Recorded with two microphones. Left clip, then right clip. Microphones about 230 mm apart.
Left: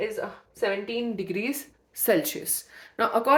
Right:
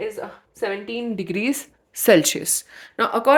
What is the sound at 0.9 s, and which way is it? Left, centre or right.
Speech, right.